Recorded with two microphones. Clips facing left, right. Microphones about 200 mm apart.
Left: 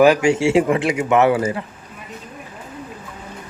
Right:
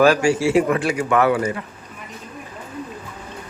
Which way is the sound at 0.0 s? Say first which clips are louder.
Left 2 dB; 20° left (ahead or behind).